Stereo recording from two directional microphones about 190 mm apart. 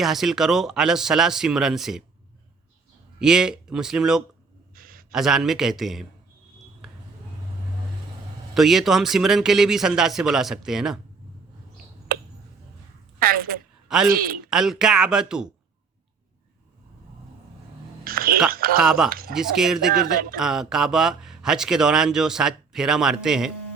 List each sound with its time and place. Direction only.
0.0 s speech: centre (ahead or behind)
3.2 s speech: 5° right (ahead or behind)
4.7 s a sound: 50° right (ahead or behind)
5.1 s speech: centre (ahead or behind)
8.5 s speech: centre (ahead or behind)
13.1 s a sound: 50° right (ahead or behind)
13.8 s a man's voice: 5° right (ahead or behind)
14.1 s speech: 50° right (ahead or behind)
14.4 s speech: centre (ahead or behind)
18.0 s a sound: 50° right (ahead or behind)
18.8 s speech: 5° right (ahead or behind)